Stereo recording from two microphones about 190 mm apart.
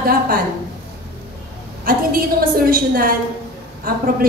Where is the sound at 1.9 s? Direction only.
50° right (ahead or behind).